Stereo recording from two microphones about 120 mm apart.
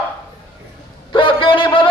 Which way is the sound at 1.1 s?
45° left (ahead or behind).